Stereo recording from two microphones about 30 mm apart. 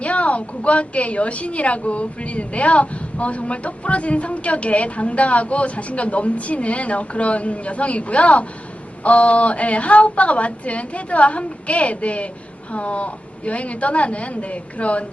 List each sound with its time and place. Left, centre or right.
0.0 s a woman's voice: left